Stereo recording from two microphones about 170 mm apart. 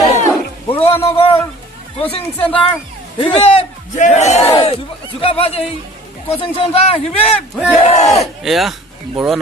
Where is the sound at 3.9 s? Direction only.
45° left (ahead or behind).